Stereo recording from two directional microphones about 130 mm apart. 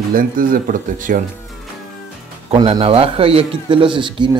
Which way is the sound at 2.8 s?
45° right (ahead or behind).